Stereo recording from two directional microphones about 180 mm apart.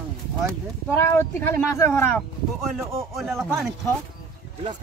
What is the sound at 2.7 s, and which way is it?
Speech, centre (ahead or behind).